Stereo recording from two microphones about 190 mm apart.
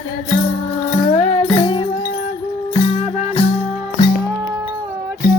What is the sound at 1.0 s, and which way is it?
Music, 30° left (ahead or behind).